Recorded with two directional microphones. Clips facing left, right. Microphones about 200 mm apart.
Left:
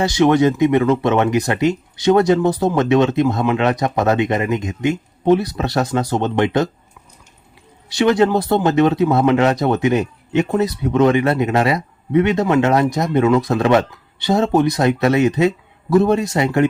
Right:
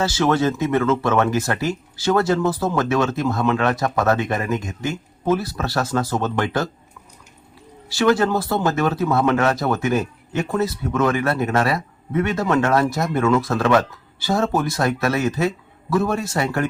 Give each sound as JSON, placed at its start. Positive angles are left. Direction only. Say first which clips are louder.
{"t": 0.0, "sound": "speech", "louder": "left 5 dB", "side_deg": 15}
{"t": 7.9, "sound": "speech", "louder": "left 3 dB", "side_deg": 20}